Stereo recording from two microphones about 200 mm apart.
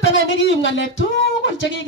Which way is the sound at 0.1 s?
70° left (ahead or behind).